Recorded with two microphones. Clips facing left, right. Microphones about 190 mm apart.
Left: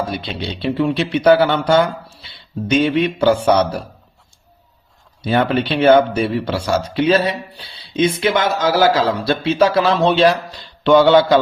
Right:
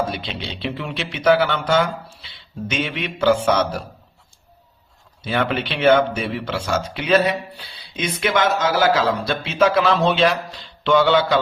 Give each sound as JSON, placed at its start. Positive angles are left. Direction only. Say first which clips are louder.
{"t": 0.1, "sound": "speech", "louder": "left 4 dB", "side_deg": 35}
{"t": 5.2, "sound": "speech", "louder": "left 5 dB", "side_deg": 35}